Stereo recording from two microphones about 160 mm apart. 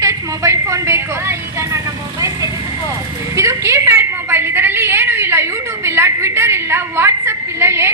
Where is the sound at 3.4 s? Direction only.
20° right (ahead or behind).